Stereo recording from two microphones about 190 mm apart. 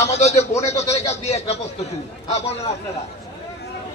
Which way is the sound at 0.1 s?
35° left (ahead or behind).